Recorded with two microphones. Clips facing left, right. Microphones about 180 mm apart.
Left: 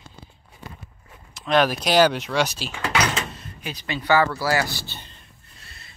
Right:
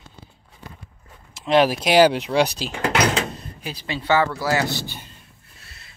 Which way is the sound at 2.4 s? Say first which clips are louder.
Right 3 dB; 35° right (ahead or behind).